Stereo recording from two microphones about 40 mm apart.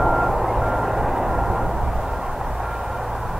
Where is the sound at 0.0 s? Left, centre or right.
Centre.